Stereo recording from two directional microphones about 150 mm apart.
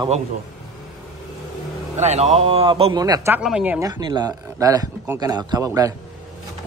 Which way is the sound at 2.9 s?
25° right (ahead or behind).